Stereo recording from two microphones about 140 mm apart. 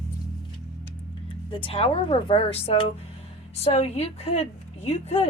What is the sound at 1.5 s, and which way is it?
A woman's voice, 35° left (ahead or behind).